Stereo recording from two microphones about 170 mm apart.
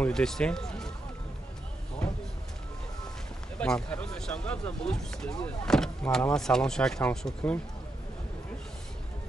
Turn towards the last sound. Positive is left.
turn(degrees=5)  # may be behind; listen again after turning